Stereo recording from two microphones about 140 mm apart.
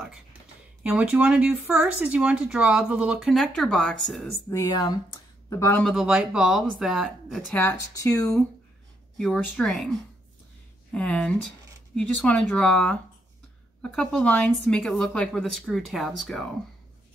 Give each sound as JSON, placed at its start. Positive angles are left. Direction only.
{"t": 0.8, "sound": "speech", "side_deg": -10}
{"t": 4.5, "sound": "speech", "side_deg": 25}
{"t": 5.9, "sound": "speech", "side_deg": -5}
{"t": 7.5, "sound": "speech", "side_deg": 20}
{"t": 9.2, "sound": "speech", "side_deg": 5}